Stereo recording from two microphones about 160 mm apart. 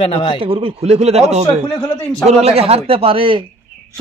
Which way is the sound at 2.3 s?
40° right (ahead or behind).